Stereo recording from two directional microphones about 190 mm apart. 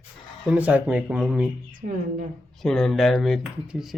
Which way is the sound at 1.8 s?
45° right (ahead or behind).